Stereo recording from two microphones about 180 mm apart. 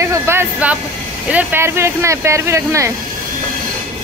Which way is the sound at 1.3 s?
10° right (ahead or behind).